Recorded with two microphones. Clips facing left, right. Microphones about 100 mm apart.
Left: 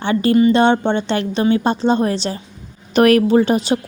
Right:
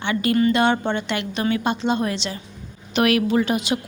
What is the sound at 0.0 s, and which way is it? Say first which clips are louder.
Speech: left 6 dB; 35° left (ahead or behind).